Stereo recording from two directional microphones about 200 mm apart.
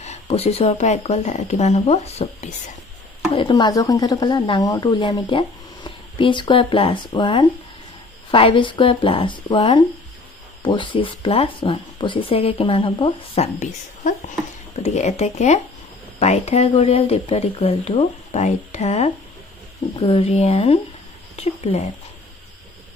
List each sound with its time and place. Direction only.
0.0 s speech: 30° left (ahead or behind)
3.4 s speech: 20° left (ahead or behind)